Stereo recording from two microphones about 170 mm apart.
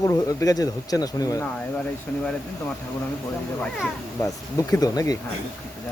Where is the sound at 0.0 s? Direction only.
20° left (ahead or behind).